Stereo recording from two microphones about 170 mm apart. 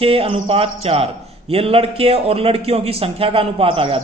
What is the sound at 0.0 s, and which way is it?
A man's voice, 35° right (ahead or behind).